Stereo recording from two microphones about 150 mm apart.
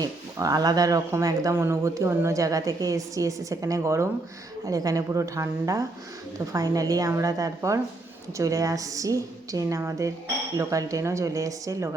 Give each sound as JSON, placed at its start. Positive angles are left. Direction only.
{"t": 0.0, "sound": "speech", "side_deg": -25}